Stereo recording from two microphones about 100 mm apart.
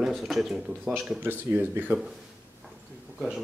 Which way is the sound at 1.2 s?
20° right (ahead or behind).